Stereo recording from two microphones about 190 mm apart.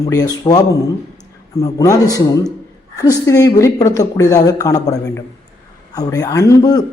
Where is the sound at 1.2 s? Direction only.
15° left (ahead or behind).